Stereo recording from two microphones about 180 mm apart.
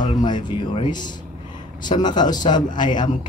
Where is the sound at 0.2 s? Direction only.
25° left (ahead or behind).